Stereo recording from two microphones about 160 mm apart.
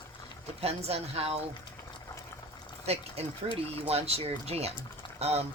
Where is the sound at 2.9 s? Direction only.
40° right (ahead or behind).